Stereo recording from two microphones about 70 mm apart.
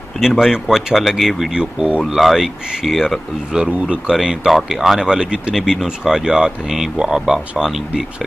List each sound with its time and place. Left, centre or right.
0.2 s speech: centre
3.5 s speech: centre